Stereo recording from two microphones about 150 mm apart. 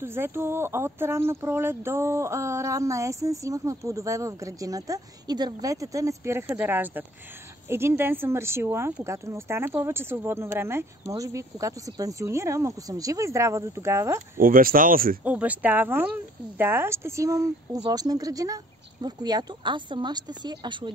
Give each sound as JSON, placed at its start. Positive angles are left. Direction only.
{"t": 0.0, "sound": "speech", "side_deg": -15}
{"t": 14.4, "sound": "speech", "side_deg": -70}
{"t": 15.2, "sound": "speech", "side_deg": -10}